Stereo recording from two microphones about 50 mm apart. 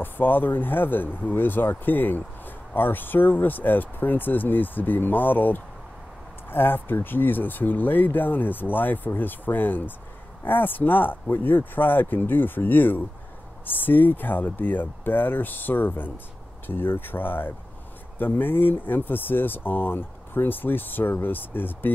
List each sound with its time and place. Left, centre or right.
0.0 s speech: left